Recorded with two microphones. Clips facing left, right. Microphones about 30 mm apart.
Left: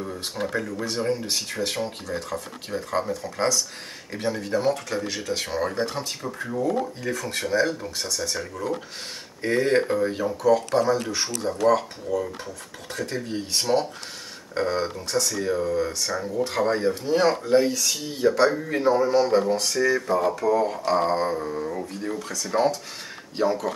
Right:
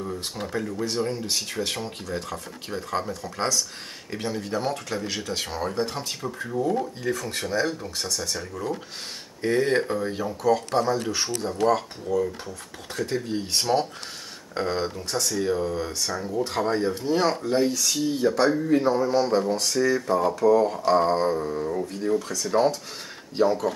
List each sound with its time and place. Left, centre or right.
0.0 s speech: centre
1.3 s speech: centre
16.0 s speech: centre